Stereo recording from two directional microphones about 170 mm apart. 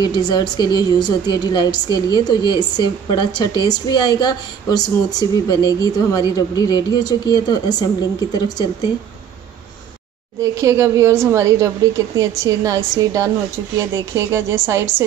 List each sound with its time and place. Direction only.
0.0 s a woman's voice: 25° left (ahead or behind)
10.4 s a woman's voice: 20° right (ahead or behind)